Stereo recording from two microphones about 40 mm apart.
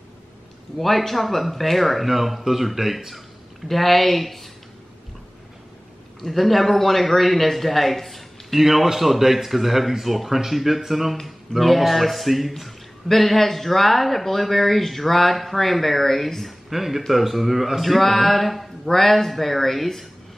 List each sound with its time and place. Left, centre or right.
0.7 s a man's voice: centre
3.6 s a man's voice: centre
6.2 s a man's voice: centre
16.7 s a man's voice: centre